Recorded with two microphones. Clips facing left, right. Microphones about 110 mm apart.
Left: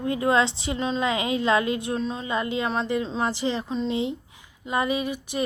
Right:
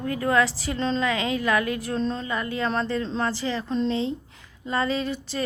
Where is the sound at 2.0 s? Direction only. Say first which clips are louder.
Right 2 dB; 5° left (ahead or behind).